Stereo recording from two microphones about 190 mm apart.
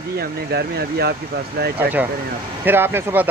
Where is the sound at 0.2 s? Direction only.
55° right (ahead or behind).